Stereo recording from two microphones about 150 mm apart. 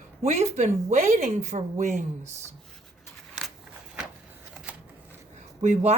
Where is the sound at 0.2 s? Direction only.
45° right (ahead or behind).